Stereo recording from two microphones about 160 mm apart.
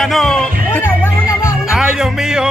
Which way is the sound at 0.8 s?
15° left (ahead or behind).